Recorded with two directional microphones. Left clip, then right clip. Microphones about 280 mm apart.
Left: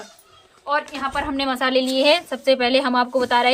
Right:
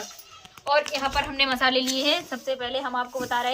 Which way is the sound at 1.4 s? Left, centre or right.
Left.